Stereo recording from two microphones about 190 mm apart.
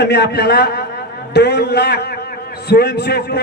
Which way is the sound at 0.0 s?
60° left (ahead or behind).